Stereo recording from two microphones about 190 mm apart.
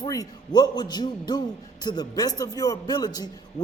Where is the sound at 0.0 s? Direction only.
20° left (ahead or behind).